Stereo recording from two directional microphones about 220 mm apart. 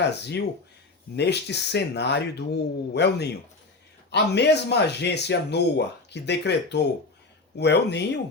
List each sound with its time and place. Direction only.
0.0 s speech: 50° left (ahead or behind)